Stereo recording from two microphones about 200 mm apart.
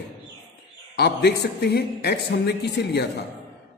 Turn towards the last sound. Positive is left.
turn(degrees=55)  # may be behind; listen again after turning